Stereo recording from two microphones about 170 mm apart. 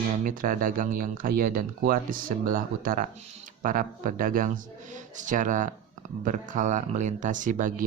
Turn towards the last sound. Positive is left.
turn(degrees=-50)  # may be behind; listen again after turning